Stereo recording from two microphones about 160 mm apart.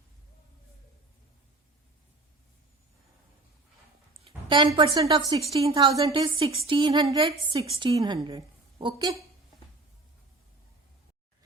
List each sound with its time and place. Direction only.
4.2 s a woman's voice: 30° right (ahead or behind)